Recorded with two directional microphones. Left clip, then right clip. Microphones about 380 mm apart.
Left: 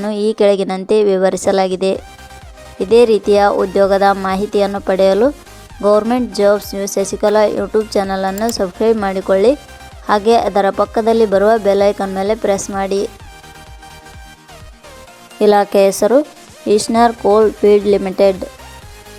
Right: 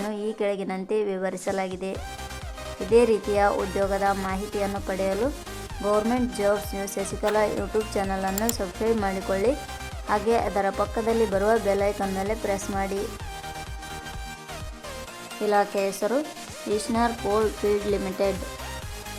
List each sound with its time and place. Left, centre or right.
0.3 s speech: centre
15.4 s speech: left